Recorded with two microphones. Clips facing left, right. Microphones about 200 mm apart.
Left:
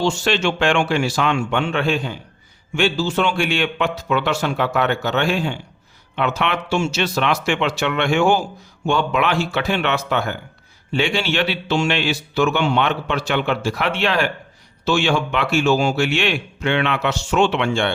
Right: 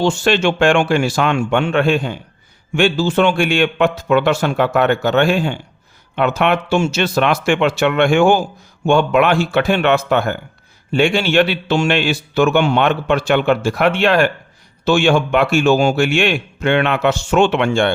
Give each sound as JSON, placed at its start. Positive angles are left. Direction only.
{"t": 0.0, "sound": "a man's voice", "side_deg": -55}